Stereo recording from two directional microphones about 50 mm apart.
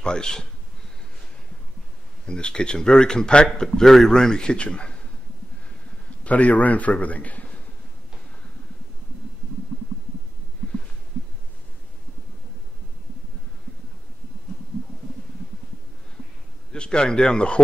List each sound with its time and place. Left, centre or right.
0.0 s speech: centre
2.2 s speech: centre
6.2 s a man's voice: left
16.7 s speech: centre